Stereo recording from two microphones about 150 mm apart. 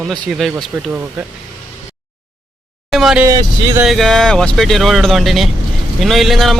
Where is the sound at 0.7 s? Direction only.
10° right (ahead or behind).